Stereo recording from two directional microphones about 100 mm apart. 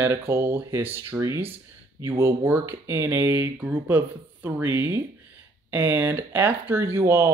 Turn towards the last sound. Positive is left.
turn(degrees=-25)  # may be behind; listen again after turning